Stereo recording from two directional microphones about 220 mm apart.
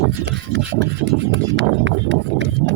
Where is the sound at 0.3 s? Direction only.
55° right (ahead or behind).